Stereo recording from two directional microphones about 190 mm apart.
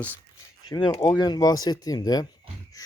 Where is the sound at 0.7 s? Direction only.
25° left (ahead or behind).